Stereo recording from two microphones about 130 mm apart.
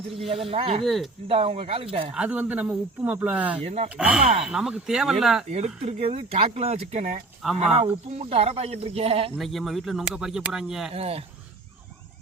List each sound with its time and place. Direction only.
0.5 s speech: 50° right (ahead or behind)
0.9 s speech: centre (ahead or behind)
1.3 s speech: 50° right (ahead or behind)
2.1 s speech: 10° right (ahead or behind)
3.6 s speech: 55° right (ahead or behind)
3.8 s speech: 10° right (ahead or behind)
4.2 s speech: 55° right (ahead or behind)
4.4 s speech: 5° right (ahead or behind)
5.5 s speech: 55° right (ahead or behind)
7.6 s speech: 55° right (ahead or behind)
9.4 s speech: centre (ahead or behind)
10.9 s speech: 50° right (ahead or behind)